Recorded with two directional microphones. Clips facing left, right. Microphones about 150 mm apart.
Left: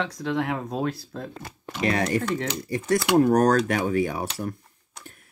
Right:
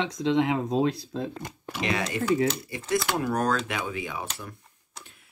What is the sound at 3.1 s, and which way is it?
Speech, 40° left (ahead or behind).